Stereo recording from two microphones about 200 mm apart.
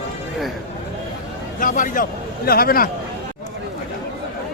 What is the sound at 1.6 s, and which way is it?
A man's voice, 40° left (ahead or behind).